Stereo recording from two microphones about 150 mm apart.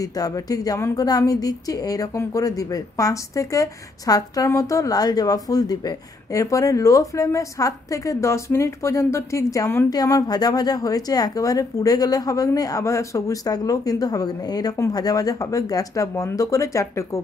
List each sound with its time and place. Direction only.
0.0 s speech: 25° left (ahead or behind)